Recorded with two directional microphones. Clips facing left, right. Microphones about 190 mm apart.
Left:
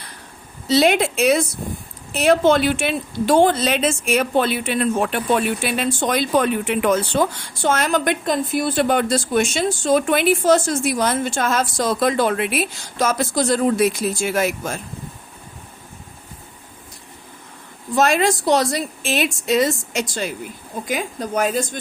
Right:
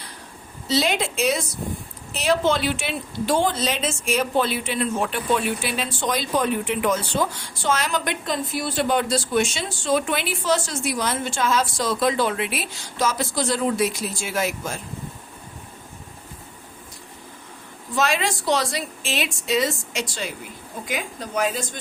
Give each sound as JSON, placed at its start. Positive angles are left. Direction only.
{"t": 0.7, "sound": "a woman's voice", "side_deg": 55}
{"t": 17.9, "sound": "a woman's voice", "side_deg": 45}